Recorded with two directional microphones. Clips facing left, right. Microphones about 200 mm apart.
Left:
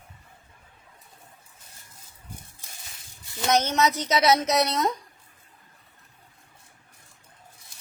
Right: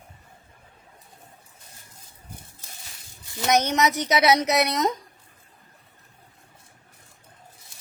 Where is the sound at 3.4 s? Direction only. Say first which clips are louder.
Right 1 dB; 15° right (ahead or behind).